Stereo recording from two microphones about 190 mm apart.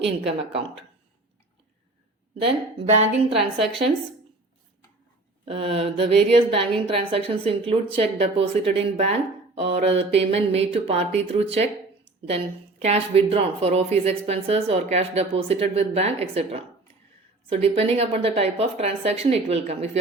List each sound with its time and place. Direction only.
2.4 s a woman's voice: 30° right (ahead or behind)
5.5 s a woman's voice: 30° right (ahead or behind)
12.8 s speech: 30° right (ahead or behind)